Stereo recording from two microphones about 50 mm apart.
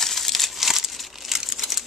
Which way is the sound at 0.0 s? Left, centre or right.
Centre.